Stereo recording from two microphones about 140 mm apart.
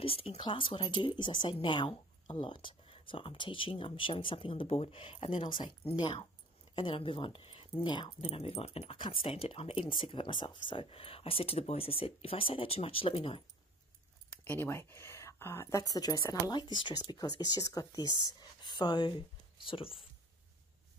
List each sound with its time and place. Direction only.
0.0 s speech: 45° left (ahead or behind)
8.2 s speech: 50° left (ahead or behind)
14.4 s speech: 15° left (ahead or behind)
18.0 s speech: 30° right (ahead or behind)
18.6 s speech: 30° left (ahead or behind)